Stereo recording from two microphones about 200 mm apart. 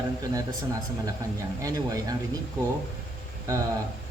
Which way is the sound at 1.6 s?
15° right (ahead or behind).